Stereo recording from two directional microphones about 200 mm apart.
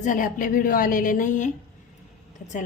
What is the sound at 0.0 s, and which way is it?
A woman's voice, 40° left (ahead or behind).